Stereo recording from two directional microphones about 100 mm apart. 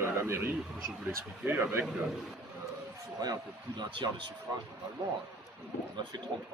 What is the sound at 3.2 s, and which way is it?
A man's voice, 40° right (ahead or behind).